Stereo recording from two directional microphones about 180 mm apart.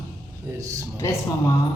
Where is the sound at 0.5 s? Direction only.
20° right (ahead or behind).